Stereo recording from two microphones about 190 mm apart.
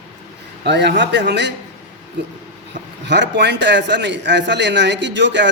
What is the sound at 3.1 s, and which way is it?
A man's voice, 65° right (ahead or behind).